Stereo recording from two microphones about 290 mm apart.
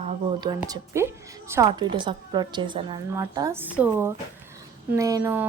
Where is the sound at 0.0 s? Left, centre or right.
Centre.